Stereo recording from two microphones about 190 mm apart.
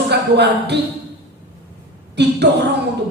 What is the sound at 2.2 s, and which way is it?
Speech, 60° right (ahead or behind).